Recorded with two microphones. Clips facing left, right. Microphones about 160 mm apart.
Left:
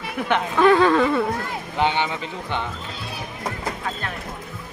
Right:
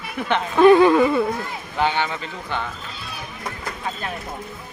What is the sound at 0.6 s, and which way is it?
Speech, 20° right (ahead or behind).